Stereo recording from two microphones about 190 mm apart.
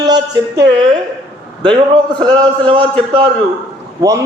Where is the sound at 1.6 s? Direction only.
25° right (ahead or behind).